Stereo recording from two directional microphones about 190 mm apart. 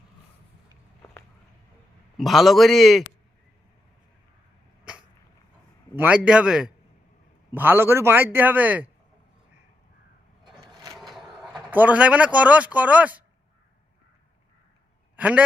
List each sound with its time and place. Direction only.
2.1 s a man's voice: centre (ahead or behind)
6.0 s a man's voice: 5° right (ahead or behind)
10.4 s a sound: 20° right (ahead or behind)
10.9 s speech: centre (ahead or behind)
15.1 s a man's voice: 5° right (ahead or behind)